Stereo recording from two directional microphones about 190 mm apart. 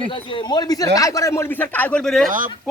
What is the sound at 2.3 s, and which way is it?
Speech, 45° right (ahead or behind).